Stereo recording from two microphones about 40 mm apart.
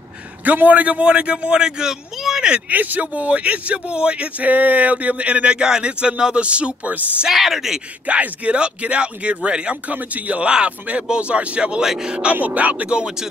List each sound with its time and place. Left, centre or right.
0.5 s a man's voice: right; by 2.0 s centre
2.7 s speech: right
4.4 s speech: right
7.2 s speech: centre
8.1 s a man's voice: right
9.8 s speech: right
10.4 s a man's voice: right
11.8 s speech: centre
12.1 s a man's voice: right
12.4 s speech: right
12.9 s a man's voice: right